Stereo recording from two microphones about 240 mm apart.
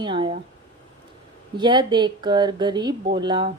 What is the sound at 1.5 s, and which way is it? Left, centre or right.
A woman's voice, centre.